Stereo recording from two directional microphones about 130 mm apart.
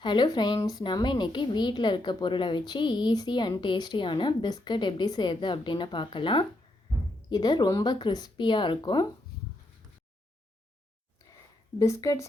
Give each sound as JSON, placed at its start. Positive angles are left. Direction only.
{"t": 0.0, "sound": "a woman's voice", "side_deg": 35}
{"t": 11.8, "sound": "a woman's voice", "side_deg": 25}